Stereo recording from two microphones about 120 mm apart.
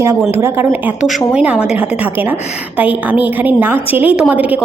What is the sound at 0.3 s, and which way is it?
A woman's voice, 20° right (ahead or behind).